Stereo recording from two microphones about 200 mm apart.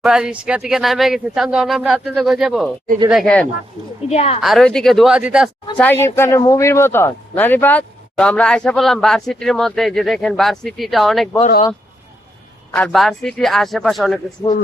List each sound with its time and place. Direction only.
0.0 s speech: 5° right (ahead or behind)
4.1 s a woman's voice: 30° left (ahead or behind)
4.4 s speech: centre (ahead or behind)
5.7 s speech: 10° left (ahead or behind)
12.7 s speech: 5° left (ahead or behind)